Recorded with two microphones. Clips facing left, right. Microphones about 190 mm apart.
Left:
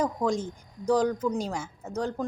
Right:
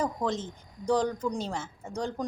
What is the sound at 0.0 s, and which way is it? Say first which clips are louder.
A woman's voice: left 3 dB; 10° left (ahead or behind).